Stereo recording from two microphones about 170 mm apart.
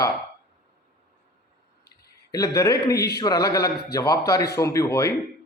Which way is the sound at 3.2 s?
20° left (ahead or behind).